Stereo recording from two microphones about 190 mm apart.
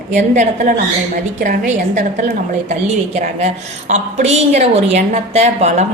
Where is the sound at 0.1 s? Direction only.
40° right (ahead or behind).